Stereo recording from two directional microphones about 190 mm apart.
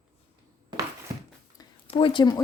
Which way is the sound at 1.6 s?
25° left (ahead or behind).